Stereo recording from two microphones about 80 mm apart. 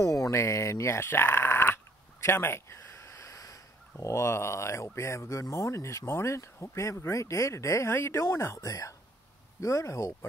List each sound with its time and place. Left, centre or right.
0.0 s speech: left
2.2 s a sound: left
4.0 s speech: left